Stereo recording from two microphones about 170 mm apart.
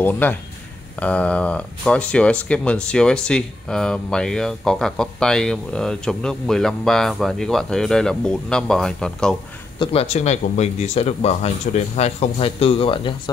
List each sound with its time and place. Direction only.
0.0 s speech: 10° left (ahead or behind)
9.8 s speech: 35° left (ahead or behind)